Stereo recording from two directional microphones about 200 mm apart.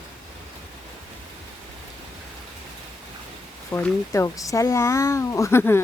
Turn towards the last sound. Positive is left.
turn(degrees=10)  # may be behind; listen again after turning